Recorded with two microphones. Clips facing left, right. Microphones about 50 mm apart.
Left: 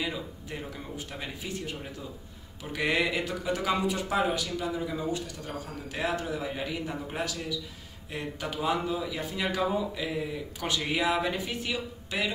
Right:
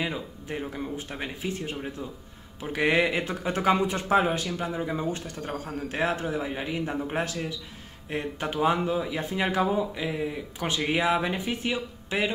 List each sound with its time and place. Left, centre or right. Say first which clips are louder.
0.0 s speech: right 2 dB; right